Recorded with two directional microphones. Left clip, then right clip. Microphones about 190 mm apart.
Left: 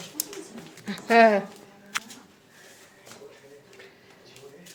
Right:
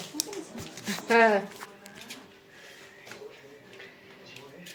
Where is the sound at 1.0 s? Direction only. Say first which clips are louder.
Left 4 dB; 25° left (ahead or behind).